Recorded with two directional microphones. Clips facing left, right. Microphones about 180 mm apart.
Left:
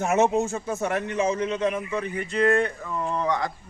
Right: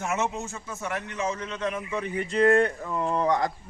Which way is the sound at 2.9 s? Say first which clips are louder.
Right 1 dB; 20° right (ahead or behind).